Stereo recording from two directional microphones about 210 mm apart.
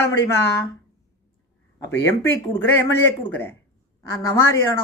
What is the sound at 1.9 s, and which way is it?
Speech, 10° left (ahead or behind).